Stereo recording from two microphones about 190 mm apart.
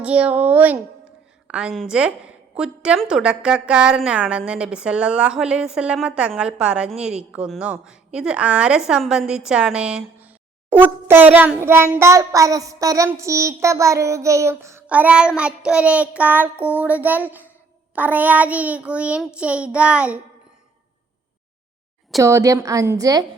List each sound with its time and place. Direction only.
0.0 s child singing: 5° right (ahead or behind)
1.5 s a woman's voice: 5° right (ahead or behind)
11.3 s child singing: 10° right (ahead or behind)
22.2 s child singing: 15° right (ahead or behind)